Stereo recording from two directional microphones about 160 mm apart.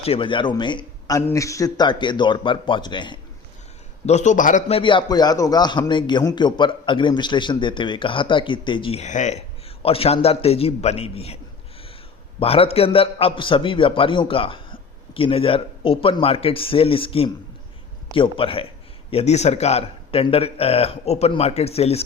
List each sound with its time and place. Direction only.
0.0 s a man's voice: 35° left (ahead or behind)
4.0 s a man's voice: 45° left (ahead or behind)
4.7 s a man's voice: 30° left (ahead or behind)
12.4 s a man's voice: 35° left (ahead or behind)